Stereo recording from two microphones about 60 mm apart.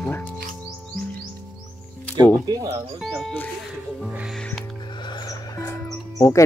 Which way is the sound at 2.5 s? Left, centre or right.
Right.